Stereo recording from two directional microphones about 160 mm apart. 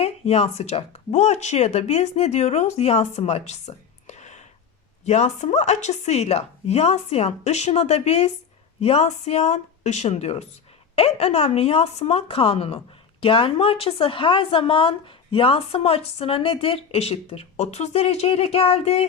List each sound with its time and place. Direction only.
0.0 s a woman's voice: 40° left (ahead or behind)